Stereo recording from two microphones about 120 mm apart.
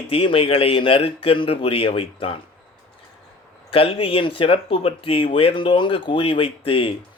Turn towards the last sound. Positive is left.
turn(degrees=50)  # may be behind; listen again after turning